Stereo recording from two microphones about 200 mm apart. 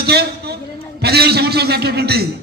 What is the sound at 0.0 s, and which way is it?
A woman's voice, 55° right (ahead or behind).